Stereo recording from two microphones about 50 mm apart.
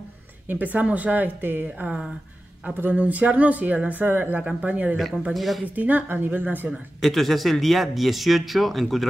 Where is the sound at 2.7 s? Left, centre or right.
Right.